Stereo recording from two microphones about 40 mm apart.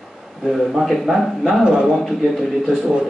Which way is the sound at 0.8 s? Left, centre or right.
Centre.